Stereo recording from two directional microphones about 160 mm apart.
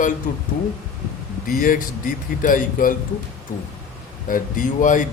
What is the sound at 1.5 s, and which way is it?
Speech, 60° left (ahead or behind).